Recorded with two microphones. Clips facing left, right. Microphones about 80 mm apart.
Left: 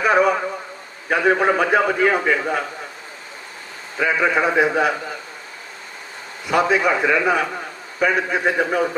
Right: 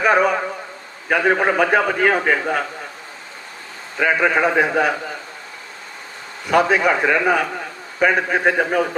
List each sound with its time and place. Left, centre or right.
0.0 s a man's voice: right
3.9 s a man's voice: right
6.4 s a man's voice: right